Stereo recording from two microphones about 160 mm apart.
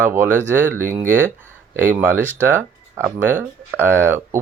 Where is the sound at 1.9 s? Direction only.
15° right (ahead or behind).